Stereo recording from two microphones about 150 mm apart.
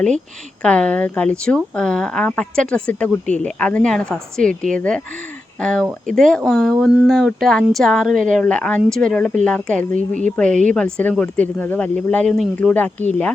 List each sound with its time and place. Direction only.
0.6 s speech: 5° left (ahead or behind)
10.5 s speech: 55° right (ahead or behind)
10.8 s speech: 5° left (ahead or behind)